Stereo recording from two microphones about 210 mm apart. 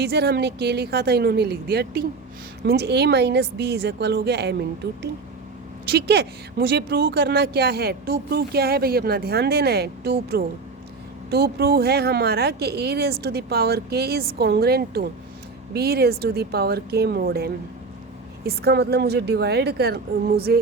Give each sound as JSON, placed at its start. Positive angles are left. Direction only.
{"t": 0.0, "sound": "speech", "side_deg": -50}
{"t": 5.9, "sound": "speech", "side_deg": -50}